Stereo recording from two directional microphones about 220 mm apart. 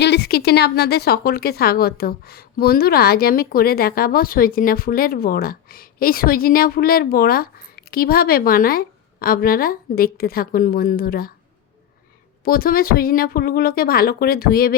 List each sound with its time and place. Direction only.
0.0 s speech: 50° left (ahead or behind)
12.5 s speech: 45° left (ahead or behind)